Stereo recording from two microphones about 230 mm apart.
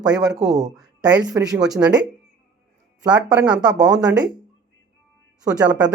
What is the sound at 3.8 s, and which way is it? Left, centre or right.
Speech, centre.